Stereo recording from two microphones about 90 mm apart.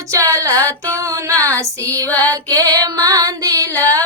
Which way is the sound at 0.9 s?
35° right (ahead or behind).